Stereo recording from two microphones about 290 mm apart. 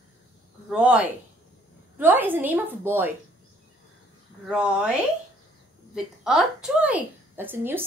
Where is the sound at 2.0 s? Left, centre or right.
Centre.